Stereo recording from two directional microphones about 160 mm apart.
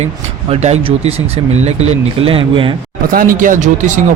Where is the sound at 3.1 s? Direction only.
60° right (ahead or behind).